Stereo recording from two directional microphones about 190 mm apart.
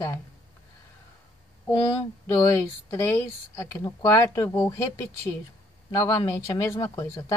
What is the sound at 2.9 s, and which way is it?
Speech, 15° left (ahead or behind).